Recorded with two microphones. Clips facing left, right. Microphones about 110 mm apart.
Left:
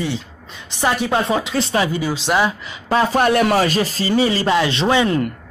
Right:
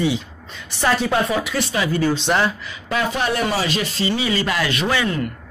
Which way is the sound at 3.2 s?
60° left (ahead or behind).